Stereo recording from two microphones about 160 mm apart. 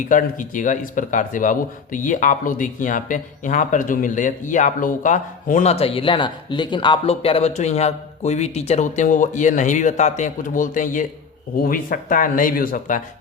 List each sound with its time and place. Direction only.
0.1 s speech: 55° left (ahead or behind)